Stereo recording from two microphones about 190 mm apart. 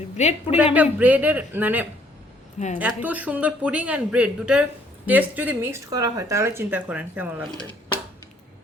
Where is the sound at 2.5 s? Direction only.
40° left (ahead or behind).